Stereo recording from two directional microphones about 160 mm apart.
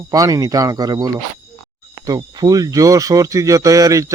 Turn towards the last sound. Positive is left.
turn(degrees=-20)  # may be behind; listen again after turning